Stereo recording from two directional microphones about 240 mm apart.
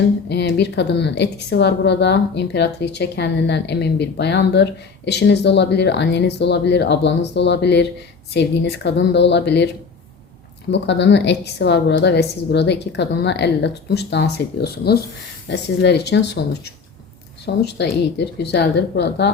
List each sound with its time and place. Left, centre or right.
0.3 s a woman's voice: left
10.7 s a woman's voice: left